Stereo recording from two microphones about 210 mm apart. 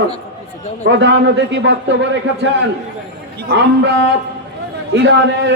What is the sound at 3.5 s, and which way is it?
A man's voice, 55° right (ahead or behind).